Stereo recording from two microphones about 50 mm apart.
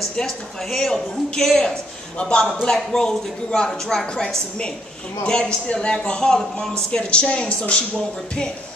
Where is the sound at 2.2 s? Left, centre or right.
Left.